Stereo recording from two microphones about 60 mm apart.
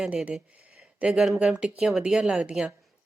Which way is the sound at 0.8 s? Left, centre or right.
Right.